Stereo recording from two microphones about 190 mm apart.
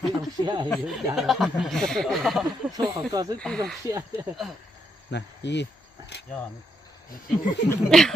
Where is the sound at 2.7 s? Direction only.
20° right (ahead or behind).